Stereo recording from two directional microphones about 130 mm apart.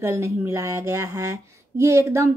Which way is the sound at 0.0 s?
20° right (ahead or behind).